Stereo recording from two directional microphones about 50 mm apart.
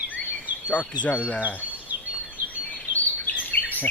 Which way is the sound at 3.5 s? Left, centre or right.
Left.